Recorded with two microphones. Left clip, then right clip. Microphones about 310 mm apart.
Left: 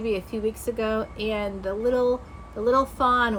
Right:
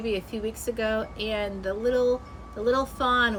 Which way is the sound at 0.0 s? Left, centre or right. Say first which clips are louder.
Left 3 dB; centre.